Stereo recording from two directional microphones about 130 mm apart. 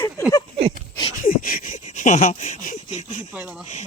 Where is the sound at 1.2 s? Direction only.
90° left; by 3.3 s 65° left (ahead or behind).